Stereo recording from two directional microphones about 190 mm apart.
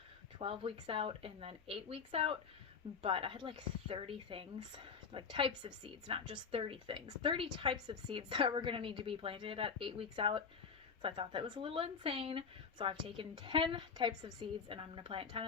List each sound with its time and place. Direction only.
0.3 s a woman's voice: 30° right (ahead or behind)